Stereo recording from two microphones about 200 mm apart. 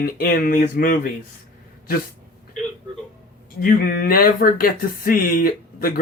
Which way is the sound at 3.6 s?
45° left (ahead or behind).